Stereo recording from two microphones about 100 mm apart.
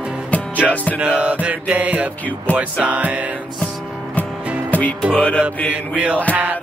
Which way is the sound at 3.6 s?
10° left (ahead or behind).